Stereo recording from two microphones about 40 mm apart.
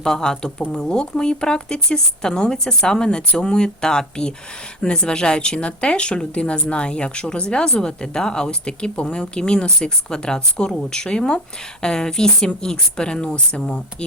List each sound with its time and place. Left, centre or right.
0.0 s speech: centre